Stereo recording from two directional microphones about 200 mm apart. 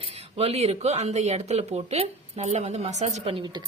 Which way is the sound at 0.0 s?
30° right (ahead or behind).